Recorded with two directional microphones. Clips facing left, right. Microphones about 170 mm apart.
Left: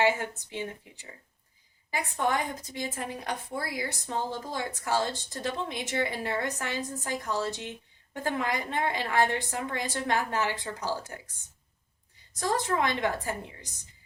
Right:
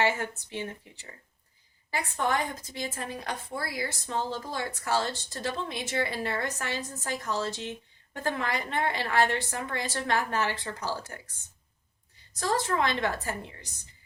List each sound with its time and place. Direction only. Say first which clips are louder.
0.0 s a woman's voice: left 2 dB; 15° left (ahead or behind)
12.4 s a woman's voice: even; 15° left (ahead or behind)